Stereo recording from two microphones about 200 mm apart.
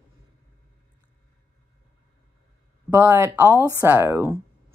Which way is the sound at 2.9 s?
10° right (ahead or behind).